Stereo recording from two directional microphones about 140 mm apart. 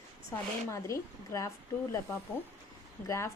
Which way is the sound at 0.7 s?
25° left (ahead or behind).